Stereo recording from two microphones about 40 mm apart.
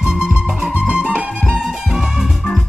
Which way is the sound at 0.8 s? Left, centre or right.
Right.